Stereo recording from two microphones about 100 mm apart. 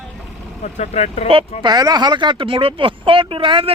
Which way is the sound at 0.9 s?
90° left.